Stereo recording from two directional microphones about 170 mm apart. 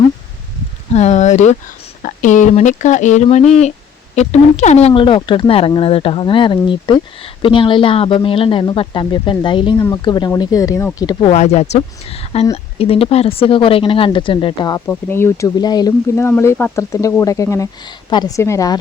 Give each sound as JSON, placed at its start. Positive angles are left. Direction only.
{"t": 0.9, "sound": "speech", "side_deg": 40}
{"t": 11.3, "sound": "speech", "side_deg": 40}
{"t": 14.8, "sound": "speech", "side_deg": 15}